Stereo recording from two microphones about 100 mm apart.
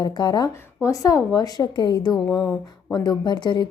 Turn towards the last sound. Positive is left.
turn(degrees=50)  # may be behind; listen again after turning